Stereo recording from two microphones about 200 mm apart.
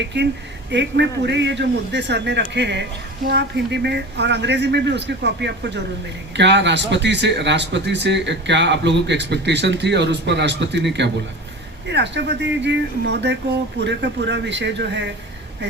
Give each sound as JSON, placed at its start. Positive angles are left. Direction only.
{"t": 0.0, "sound": "speech", "side_deg": -60}
{"t": 11.9, "sound": "speech", "side_deg": -60}